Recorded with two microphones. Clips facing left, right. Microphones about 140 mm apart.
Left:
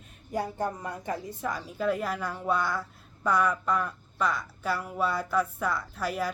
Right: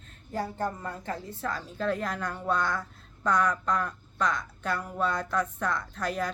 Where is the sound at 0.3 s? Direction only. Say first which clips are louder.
Left 1 dB; 15° left (ahead or behind).